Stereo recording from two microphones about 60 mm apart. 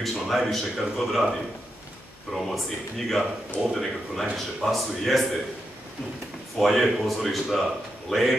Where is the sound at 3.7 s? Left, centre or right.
Centre.